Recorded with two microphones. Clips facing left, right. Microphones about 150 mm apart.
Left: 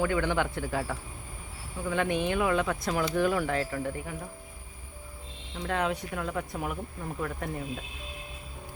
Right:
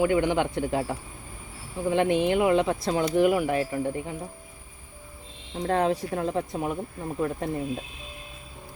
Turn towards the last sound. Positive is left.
turn(degrees=-25)  # may be behind; listen again after turning